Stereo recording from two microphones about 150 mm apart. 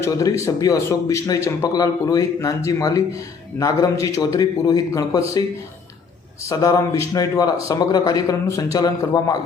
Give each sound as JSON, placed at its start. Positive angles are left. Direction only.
{"t": 0.0, "sound": "speech", "side_deg": 20}